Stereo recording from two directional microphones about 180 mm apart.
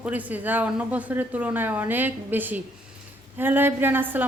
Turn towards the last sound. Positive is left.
turn(degrees=-10)  # may be behind; listen again after turning